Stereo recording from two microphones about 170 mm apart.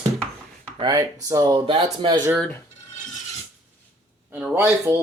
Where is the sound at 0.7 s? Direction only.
25° right (ahead or behind).